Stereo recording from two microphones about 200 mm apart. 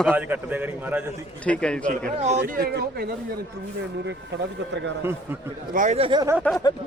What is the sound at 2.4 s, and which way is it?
Speech, 50° right (ahead or behind).